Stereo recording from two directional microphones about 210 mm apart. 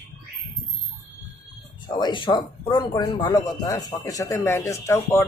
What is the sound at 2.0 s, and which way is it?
Speech, 20° left (ahead or behind).